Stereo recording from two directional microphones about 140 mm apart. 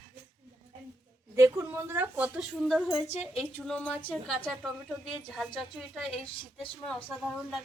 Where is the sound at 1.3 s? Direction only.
20° right (ahead or behind).